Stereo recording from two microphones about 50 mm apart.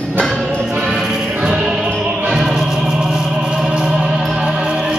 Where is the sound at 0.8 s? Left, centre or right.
Centre.